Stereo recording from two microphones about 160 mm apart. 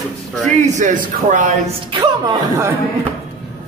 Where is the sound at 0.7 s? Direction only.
50° right (ahead or behind).